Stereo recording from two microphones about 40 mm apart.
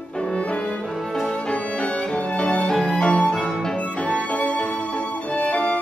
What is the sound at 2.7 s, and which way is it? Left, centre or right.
Music, centre.